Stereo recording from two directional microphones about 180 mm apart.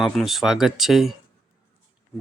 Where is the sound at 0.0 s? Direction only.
Centre (ahead or behind).